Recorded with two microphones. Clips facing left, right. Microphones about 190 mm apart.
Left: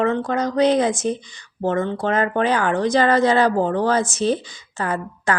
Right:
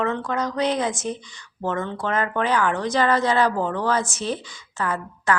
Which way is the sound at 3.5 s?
35° left (ahead or behind).